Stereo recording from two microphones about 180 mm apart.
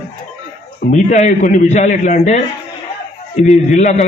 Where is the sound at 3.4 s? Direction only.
40° left (ahead or behind).